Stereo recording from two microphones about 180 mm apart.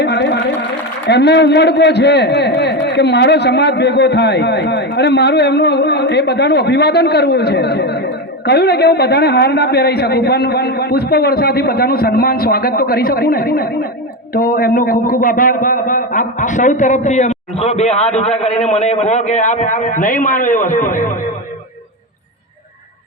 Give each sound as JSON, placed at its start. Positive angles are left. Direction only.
{"t": 0.0, "sound": "sewing machine", "side_deg": 70}
{"t": 1.0, "sound": "a man's voice", "side_deg": 70}